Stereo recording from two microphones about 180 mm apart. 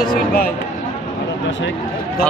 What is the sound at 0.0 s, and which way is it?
Speech, 55° left (ahead or behind).